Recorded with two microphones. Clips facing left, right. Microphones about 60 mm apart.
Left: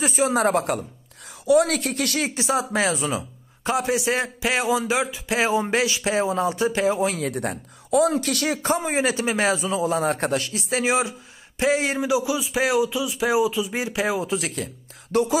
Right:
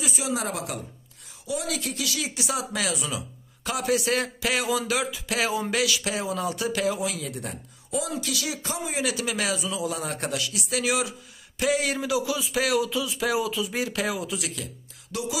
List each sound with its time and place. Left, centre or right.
0.0 s speech: left
1.4 s speech: left
2.4 s a man's voice: left
7.2 s a man's voice: left